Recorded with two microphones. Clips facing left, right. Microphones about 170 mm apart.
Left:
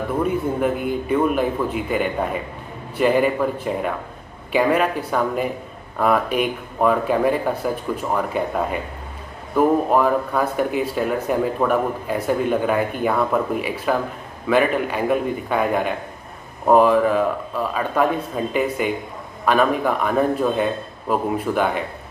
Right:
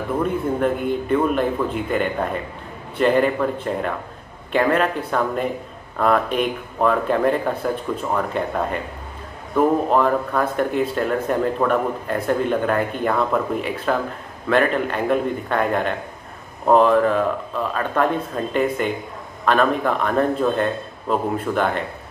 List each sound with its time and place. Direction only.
0.2 s a man's voice: 5° left (ahead or behind)
4.5 s a man's voice: 5° left (ahead or behind)